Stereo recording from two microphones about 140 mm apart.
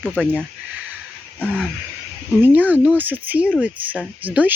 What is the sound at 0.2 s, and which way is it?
Speech, 10° right (ahead or behind).